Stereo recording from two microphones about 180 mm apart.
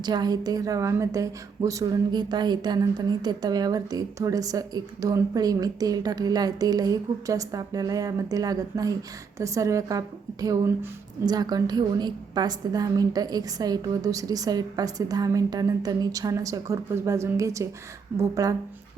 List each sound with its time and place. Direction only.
0.0 s a woman's voice: 25° right (ahead or behind)
11.3 s a woman's voice: 20° right (ahead or behind)